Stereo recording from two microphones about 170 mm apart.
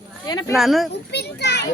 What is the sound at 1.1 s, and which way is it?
Speech, 80° left.